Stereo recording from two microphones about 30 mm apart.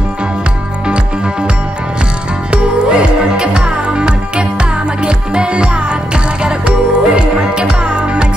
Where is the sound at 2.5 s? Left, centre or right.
Right.